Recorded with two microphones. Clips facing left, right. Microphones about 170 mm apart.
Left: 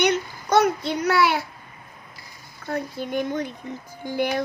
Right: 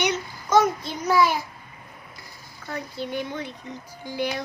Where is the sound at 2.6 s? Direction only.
50° left (ahead or behind).